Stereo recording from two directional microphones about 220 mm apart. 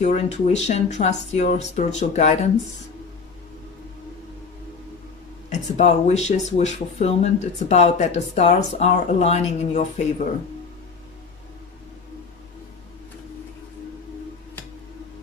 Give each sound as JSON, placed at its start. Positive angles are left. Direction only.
{"t": 0.0, "sound": "speech", "side_deg": 30}
{"t": 5.5, "sound": "speech", "side_deg": 30}